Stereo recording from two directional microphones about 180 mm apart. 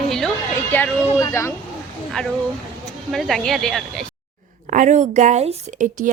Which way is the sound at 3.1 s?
Centre (ahead or behind).